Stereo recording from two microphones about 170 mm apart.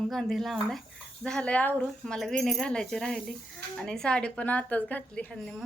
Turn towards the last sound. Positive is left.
turn(degrees=5)  # may be behind; listen again after turning